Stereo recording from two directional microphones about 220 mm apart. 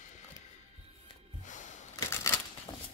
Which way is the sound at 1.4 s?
35° left (ahead or behind).